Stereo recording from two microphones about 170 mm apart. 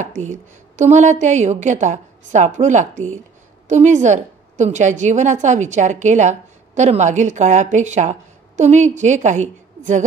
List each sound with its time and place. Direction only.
0.0 s a woman's voice: 45° right (ahead or behind)